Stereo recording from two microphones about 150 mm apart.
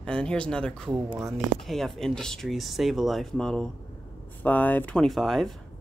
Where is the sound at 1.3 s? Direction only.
Centre (ahead or behind).